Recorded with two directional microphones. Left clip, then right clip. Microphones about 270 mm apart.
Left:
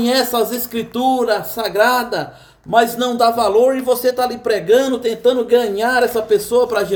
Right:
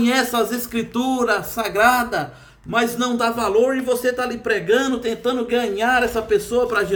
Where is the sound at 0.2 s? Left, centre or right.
Right.